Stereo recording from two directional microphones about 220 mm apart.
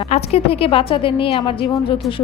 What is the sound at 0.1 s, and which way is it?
A woman's voice, 25° left (ahead or behind).